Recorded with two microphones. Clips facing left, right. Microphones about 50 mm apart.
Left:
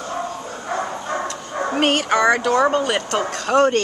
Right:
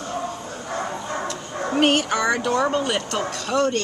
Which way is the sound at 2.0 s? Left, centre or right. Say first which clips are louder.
Left 5 dB; left.